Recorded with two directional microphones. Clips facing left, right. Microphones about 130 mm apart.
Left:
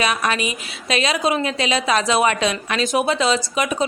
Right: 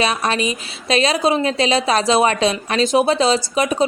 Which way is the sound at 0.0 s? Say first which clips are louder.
Right 2 dB; 30° right (ahead or behind).